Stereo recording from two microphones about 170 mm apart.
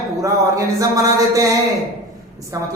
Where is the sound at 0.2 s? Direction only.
20° right (ahead or behind).